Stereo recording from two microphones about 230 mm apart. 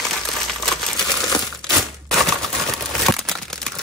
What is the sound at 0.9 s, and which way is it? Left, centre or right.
Crumpling, centre.